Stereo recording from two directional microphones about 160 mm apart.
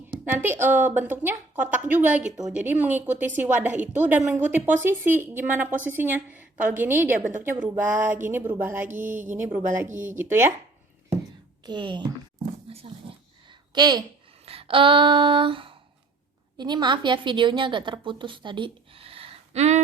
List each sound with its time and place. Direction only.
0.3 s a woman's voice: 10° right (ahead or behind)
9.0 s speech: 55° right (ahead or behind)
9.3 s a woman's voice: 15° right (ahead or behind)
11.6 s speech: 30° right (ahead or behind)
12.6 s dog: 35° right (ahead or behind)
13.5 s a sound: 25° right (ahead or behind)
16.6 s a woman's voice: 25° right (ahead or behind); by 19.8 s 45° right (ahead or behind)